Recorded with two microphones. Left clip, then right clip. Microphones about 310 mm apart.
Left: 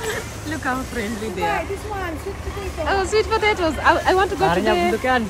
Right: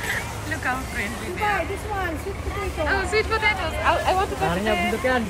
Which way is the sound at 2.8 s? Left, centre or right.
Centre.